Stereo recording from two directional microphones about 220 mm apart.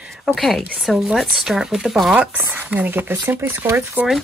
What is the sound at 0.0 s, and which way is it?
Speech, centre (ahead or behind).